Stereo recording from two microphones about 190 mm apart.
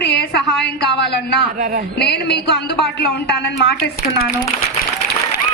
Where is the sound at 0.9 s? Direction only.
60° left (ahead or behind).